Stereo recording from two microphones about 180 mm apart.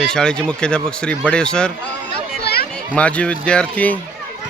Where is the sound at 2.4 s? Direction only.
60° left (ahead or behind).